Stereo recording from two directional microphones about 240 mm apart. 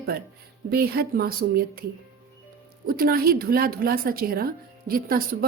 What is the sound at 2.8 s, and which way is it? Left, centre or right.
A woman's voice, right.